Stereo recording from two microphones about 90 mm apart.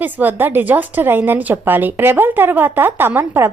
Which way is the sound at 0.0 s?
20° right (ahead or behind).